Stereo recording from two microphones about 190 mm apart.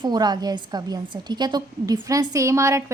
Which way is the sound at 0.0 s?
20° right (ahead or behind).